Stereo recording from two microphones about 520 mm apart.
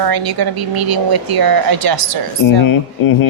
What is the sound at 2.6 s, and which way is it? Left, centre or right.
Speech, left.